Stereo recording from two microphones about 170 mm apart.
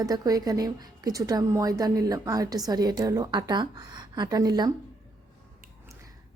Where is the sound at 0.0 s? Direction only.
20° right (ahead or behind).